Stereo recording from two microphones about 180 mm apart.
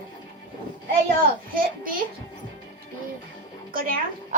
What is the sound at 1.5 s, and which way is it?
Speech, 50° right (ahead or behind).